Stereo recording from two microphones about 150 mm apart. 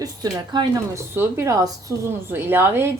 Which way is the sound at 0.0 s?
25° right (ahead or behind).